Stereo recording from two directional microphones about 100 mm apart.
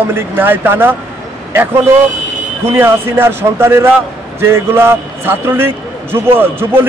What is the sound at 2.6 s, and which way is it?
A man's voice, 25° right (ahead or behind).